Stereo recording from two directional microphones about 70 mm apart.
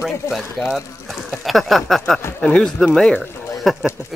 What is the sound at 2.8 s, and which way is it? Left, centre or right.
Speech, centre.